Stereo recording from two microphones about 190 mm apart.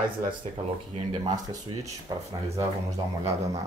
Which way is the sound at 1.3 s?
20° right (ahead or behind).